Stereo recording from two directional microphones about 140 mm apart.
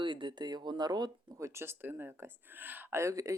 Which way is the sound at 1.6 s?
15° right (ahead or behind).